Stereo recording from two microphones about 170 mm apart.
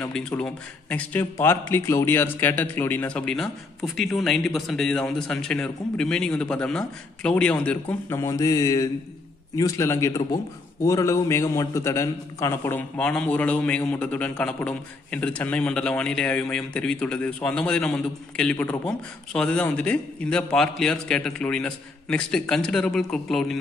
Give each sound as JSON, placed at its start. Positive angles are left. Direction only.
{"t": 0.0, "sound": "a man's voice", "side_deg": 5}